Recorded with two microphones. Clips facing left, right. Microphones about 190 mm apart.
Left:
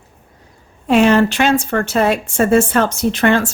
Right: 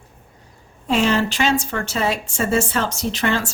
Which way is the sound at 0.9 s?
60° left (ahead or behind).